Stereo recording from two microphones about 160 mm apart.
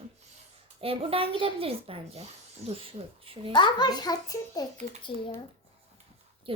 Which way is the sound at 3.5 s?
30° left (ahead or behind).